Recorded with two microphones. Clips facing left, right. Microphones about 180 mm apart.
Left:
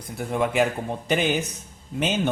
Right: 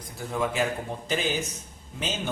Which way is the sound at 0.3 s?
65° left (ahead or behind).